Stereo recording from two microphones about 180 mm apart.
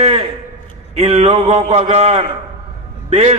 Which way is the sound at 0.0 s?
35° right (ahead or behind).